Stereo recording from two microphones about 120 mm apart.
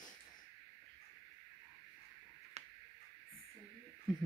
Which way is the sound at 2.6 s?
65° right (ahead or behind).